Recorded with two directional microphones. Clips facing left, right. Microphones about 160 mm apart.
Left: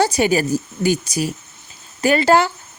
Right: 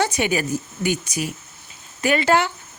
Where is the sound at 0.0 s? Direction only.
35° left (ahead or behind).